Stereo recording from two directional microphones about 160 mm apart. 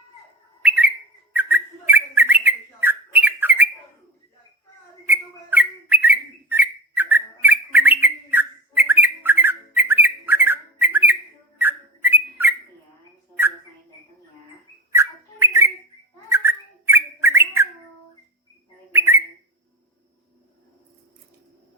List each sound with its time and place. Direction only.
1.3 s bird: 10° right (ahead or behind)
5.0 s bird: 10° right (ahead or behind)
11.6 s a sound: 10° right (ahead or behind)
14.9 s bird: 15° right (ahead or behind)
18.9 s bird: 15° right (ahead or behind)